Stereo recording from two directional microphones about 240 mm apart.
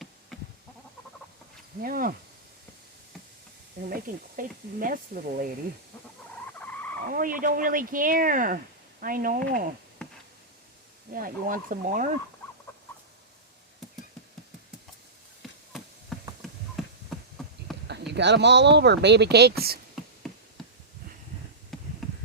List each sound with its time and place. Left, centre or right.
0.3 s goat: centre
1.8 s speech: right
3.8 s speech: right
7.1 s speech: right
10.0 s a sound: centre
11.1 s speech: right
15.4 s a sound: centre
16.8 s hum: centre
17.8 s speech: right
20.2 s insect: centre
21.7 s a sound: centre